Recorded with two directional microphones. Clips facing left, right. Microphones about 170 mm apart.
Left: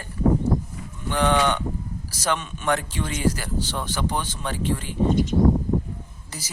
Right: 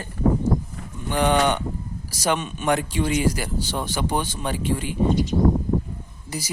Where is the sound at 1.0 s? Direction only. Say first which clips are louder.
Right 1 dB; 15° right (ahead or behind).